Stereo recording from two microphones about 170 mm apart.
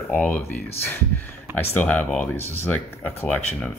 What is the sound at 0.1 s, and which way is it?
Speech, 10° left (ahead or behind).